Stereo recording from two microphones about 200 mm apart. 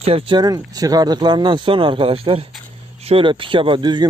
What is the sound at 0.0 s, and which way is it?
Speech, 30° right (ahead or behind).